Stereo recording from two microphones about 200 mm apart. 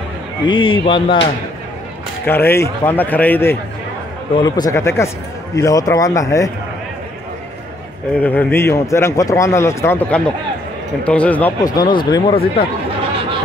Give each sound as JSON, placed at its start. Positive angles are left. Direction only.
{"t": 0.5, "sound": "speech", "side_deg": 25}
{"t": 2.2, "sound": "a man's voice", "side_deg": 10}
{"t": 8.2, "sound": "a man's voice", "side_deg": 10}
{"t": 11.6, "sound": "speech", "side_deg": 20}